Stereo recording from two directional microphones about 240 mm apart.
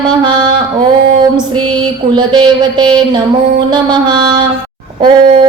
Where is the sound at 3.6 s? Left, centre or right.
Centre.